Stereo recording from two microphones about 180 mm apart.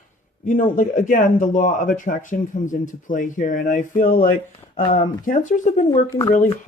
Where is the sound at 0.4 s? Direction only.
45° left (ahead or behind).